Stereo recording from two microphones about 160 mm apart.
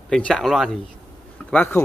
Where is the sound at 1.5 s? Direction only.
15° left (ahead or behind).